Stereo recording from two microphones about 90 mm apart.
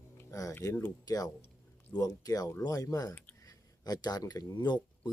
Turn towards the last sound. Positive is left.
turn(degrees=50)  # may be behind; listen again after turning